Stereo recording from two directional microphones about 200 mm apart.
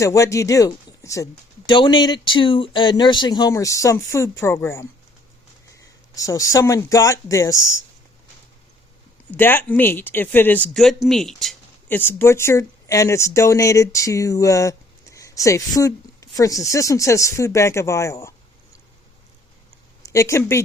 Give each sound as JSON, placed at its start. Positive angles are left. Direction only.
{"t": 0.0, "sound": "speech", "side_deg": 15}
{"t": 6.1, "sound": "speech", "side_deg": 15}
{"t": 9.3, "sound": "speech", "side_deg": 10}
{"t": 20.0, "sound": "speech", "side_deg": 15}